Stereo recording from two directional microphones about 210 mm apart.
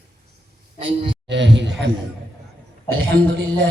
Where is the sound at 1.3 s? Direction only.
60° right (ahead or behind).